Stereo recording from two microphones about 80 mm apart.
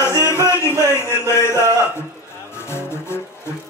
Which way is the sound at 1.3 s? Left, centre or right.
Left.